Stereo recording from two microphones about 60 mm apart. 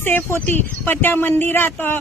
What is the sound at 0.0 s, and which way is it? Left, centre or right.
Speech, left.